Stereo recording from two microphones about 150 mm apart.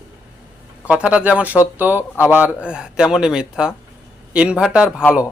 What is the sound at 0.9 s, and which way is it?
A man's voice, 10° right (ahead or behind).